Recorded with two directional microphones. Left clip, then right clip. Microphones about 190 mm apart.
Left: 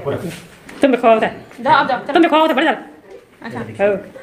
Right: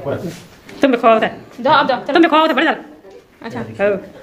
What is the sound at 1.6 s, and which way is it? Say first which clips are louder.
Speech: right 1 dB; 65° right (ahead or behind).